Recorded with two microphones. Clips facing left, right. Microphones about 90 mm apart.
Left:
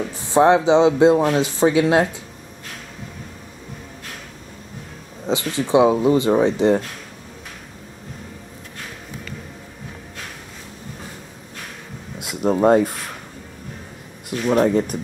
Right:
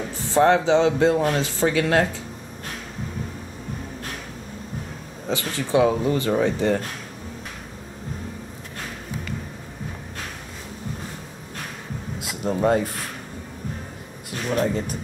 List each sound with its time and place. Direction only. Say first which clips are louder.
0.3 s speech: left 3 dB; 15° left (ahead or behind)
5.2 s speech: left 5 dB; 20° left (ahead or behind)
12.3 s speech: left 5 dB; 30° left (ahead or behind)
14.5 s speech: left 6 dB; 40° left (ahead or behind)